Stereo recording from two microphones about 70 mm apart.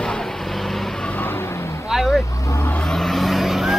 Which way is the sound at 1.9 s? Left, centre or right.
Centre.